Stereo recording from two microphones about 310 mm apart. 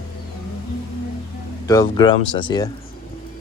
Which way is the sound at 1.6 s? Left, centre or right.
Centre.